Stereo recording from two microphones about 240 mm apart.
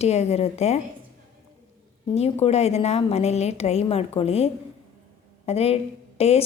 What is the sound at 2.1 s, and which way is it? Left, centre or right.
A woman's voice, left.